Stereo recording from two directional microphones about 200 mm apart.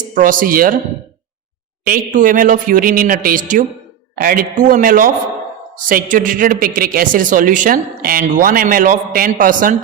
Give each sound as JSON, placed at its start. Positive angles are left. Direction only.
{"t": 0.1, "sound": "a man's voice", "side_deg": -40}
{"t": 1.8, "sound": "a man's voice", "side_deg": -45}